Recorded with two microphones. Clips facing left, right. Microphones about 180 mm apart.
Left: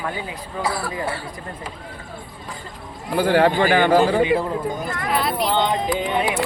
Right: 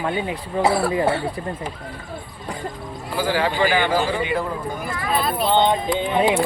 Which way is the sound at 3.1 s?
60° left (ahead or behind).